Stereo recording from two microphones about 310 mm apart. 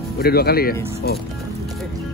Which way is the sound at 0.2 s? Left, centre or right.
Left.